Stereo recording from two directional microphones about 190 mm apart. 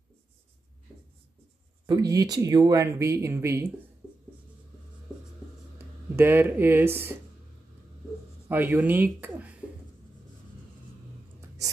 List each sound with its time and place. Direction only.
1.9 s speech: 20° right (ahead or behind)
6.1 s speech: 10° right (ahead or behind)
8.5 s speech: 10° right (ahead or behind)